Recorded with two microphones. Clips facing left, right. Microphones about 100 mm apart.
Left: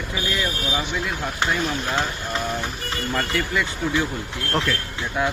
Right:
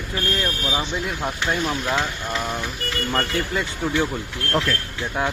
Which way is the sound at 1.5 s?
40° right (ahead or behind).